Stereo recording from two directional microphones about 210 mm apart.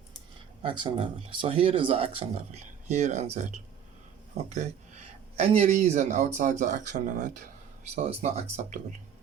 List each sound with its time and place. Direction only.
0.6 s speech: 25° right (ahead or behind)